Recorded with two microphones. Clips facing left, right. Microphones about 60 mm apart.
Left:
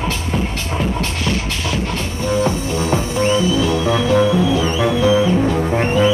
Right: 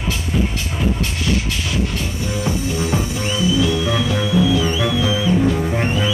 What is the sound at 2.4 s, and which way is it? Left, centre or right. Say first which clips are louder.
Music: left 3 dB; left.